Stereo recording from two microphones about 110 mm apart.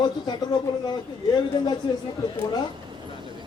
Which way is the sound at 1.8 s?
40° left (ahead or behind).